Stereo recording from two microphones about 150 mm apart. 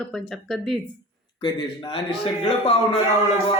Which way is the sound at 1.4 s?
30° left (ahead or behind).